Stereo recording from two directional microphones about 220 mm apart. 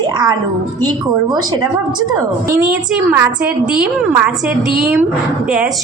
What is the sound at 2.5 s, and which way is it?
Speech, 10° right (ahead or behind).